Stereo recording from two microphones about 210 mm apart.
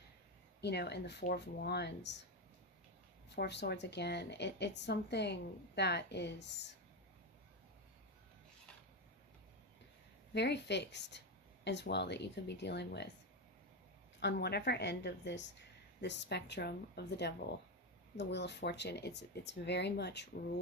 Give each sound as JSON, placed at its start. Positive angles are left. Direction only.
{"t": 0.6, "sound": "speech", "side_deg": 50}
{"t": 3.2, "sound": "speech", "side_deg": 55}
{"t": 10.3, "sound": "speech", "side_deg": 55}
{"t": 14.2, "sound": "speech", "side_deg": 50}